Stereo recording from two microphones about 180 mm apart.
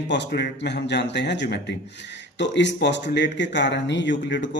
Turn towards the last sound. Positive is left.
turn(degrees=80)